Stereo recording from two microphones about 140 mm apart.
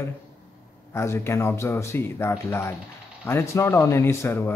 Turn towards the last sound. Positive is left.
turn(degrees=15)  # may be behind; listen again after turning